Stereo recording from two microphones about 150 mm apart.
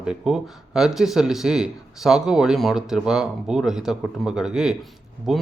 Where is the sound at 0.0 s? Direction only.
5° right (ahead or behind).